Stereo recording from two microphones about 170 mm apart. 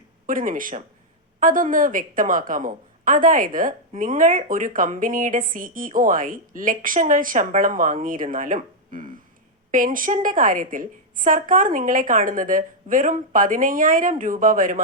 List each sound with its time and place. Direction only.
0.3 s a woman's voice: 55° right (ahead or behind)